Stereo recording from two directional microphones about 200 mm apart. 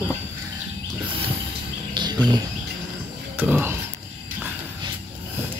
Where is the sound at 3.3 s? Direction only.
10° right (ahead or behind).